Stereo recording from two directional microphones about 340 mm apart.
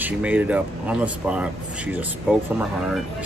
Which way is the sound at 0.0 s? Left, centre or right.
Centre.